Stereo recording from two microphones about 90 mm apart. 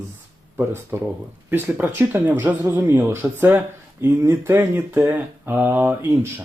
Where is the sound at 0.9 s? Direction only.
30° right (ahead or behind).